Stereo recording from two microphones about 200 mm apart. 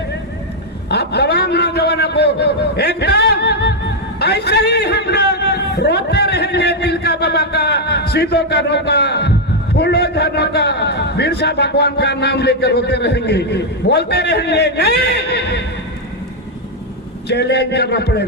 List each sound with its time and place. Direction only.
0.9 s a sound: 55° left (ahead or behind)
9.7 s a man's voice: 55° left (ahead or behind)
17.2 s a man's voice: 55° left (ahead or behind)